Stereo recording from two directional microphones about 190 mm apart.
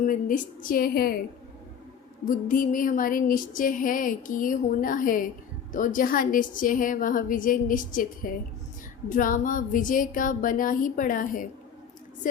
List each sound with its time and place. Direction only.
0.0 s music: 45° left (ahead or behind)
2.2 s music: 45° left (ahead or behind)